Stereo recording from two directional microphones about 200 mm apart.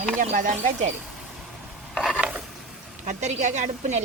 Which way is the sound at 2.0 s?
Centre (ahead or behind).